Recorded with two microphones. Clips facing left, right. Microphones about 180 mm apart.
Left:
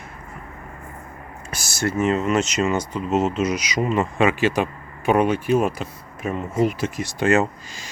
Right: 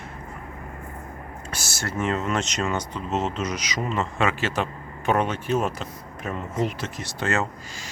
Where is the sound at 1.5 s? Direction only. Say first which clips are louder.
Left 7 dB; 15° left (ahead or behind).